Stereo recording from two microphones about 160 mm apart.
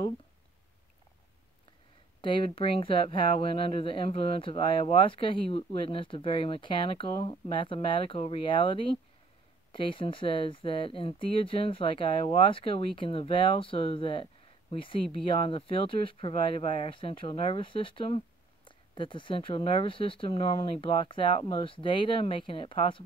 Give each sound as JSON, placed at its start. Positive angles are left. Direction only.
{"t": 2.2, "sound": "speech", "side_deg": 30}